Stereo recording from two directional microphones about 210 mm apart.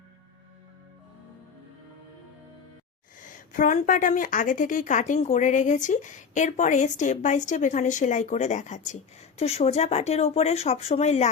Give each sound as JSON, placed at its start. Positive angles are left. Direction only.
{"t": 3.3, "sound": "a woman's voice", "side_deg": 40}